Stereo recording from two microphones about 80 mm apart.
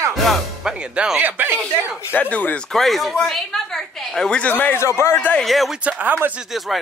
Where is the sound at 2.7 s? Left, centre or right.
Centre.